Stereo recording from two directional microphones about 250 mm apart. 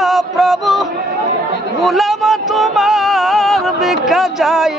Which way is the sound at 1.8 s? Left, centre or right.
Centre.